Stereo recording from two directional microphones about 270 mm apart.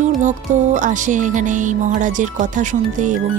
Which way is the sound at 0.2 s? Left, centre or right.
Right.